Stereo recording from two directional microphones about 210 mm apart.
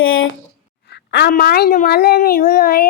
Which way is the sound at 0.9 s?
50° left (ahead or behind).